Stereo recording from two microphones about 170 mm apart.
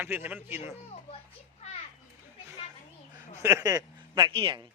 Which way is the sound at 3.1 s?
15° right (ahead or behind).